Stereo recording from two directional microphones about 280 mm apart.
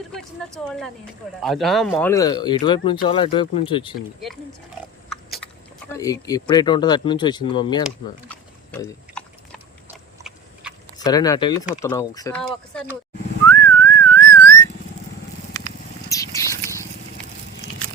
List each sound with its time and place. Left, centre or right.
0.1 s a woman's voice: centre
5.0 s biting: centre
5.9 s speech: centre
7.9 s chewing: centre
10.2 s a sound: centre
10.9 s speech: centre
13.5 s whistling: centre
16.0 s wild animals: centre